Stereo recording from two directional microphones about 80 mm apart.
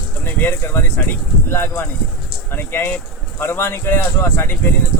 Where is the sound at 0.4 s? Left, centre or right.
Left.